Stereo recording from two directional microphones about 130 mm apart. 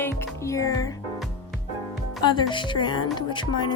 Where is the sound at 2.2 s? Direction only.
35° left (ahead or behind).